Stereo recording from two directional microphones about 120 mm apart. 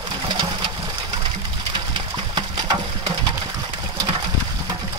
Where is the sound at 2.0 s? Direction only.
40° right (ahead or behind).